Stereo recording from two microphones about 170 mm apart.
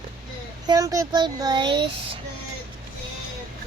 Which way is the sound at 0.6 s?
20° right (ahead or behind).